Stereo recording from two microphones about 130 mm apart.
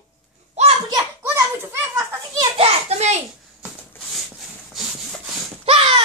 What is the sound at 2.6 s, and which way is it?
Children playing, 55° right (ahead or behind).